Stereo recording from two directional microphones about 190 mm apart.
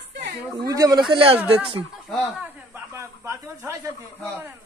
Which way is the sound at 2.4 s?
15° right (ahead or behind).